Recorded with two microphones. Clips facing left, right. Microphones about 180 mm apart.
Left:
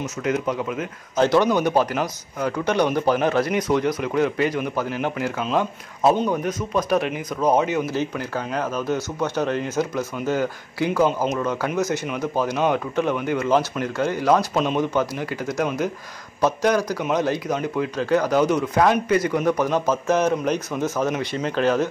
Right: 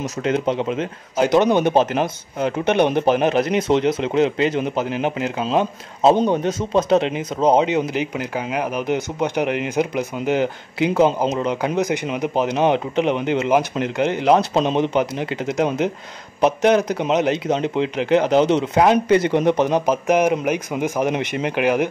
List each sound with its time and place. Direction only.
0.0 s speech: 30° right (ahead or behind)
1.1 s a man's voice: 10° right (ahead or behind)
1.4 s speech: 20° right (ahead or behind)